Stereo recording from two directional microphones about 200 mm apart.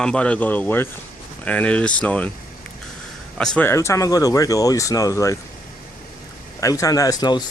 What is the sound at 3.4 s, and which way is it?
Speech, 5° left (ahead or behind).